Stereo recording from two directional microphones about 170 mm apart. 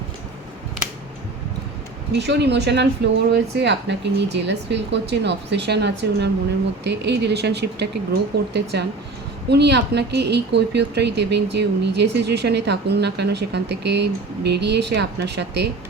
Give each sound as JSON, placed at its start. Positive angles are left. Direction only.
{"t": 2.1, "sound": "speech", "side_deg": -90}